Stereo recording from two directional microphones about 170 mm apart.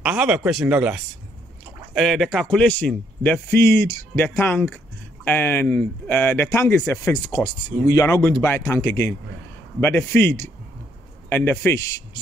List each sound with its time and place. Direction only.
0.0 s a man's voice: 10° right (ahead or behind); by 12.2 s 20° left (ahead or behind)